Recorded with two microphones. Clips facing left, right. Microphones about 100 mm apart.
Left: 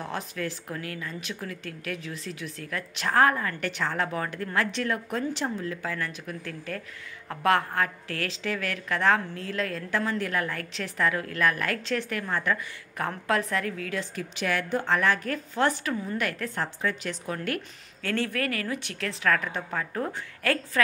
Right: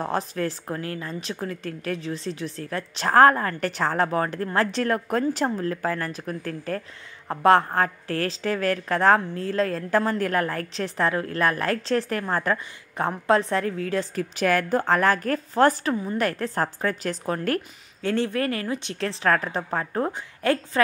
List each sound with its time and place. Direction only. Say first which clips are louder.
0.0 s a woman's voice: right 6 dB; 40° right (ahead or behind)
12.9 s a woman's voice: right 6 dB; 30° right (ahead or behind)
18.0 s a woman's voice: right 5 dB; 25° right (ahead or behind)
20.1 s a woman's voice: right 4 dB; 25° right (ahead or behind)